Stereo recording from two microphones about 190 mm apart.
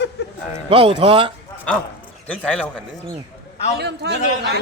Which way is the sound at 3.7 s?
60° right (ahead or behind).